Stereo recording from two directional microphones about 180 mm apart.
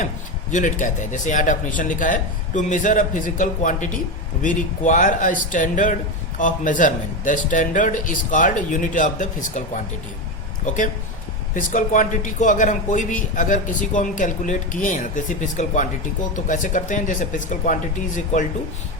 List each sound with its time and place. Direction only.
0.5 s a man's voice: 45° left (ahead or behind)
10.7 s a man's voice: 45° left (ahead or behind)